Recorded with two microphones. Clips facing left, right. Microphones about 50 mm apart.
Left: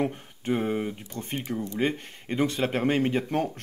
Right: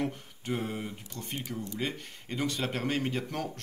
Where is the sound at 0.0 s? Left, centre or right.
Left.